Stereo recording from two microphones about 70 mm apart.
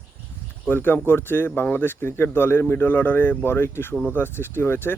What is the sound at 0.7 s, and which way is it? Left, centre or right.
Speech, left.